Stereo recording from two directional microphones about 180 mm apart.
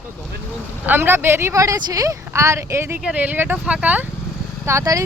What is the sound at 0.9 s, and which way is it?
Speech, 15° right (ahead or behind).